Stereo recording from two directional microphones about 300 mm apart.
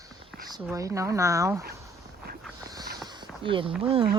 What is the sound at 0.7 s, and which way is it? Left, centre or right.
Speech, centre.